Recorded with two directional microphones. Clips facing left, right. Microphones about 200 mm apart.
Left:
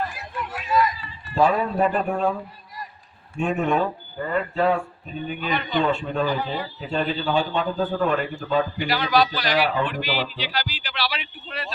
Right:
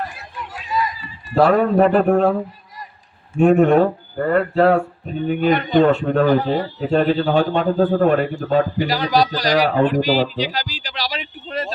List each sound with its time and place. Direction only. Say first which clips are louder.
1.4 s speech: right 6 dB; 80° right
3.4 s speech: right 10 dB; 70° right (ahead or behind)
5.0 s speech: right 11 dB; 60° right (ahead or behind)
5.8 s speech: right 7 dB; 65° right (ahead or behind)
8.8 s speech: right 3 dB; 40° right (ahead or behind)